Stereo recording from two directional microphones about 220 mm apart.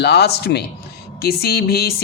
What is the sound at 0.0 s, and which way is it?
Speech, 50° left (ahead or behind).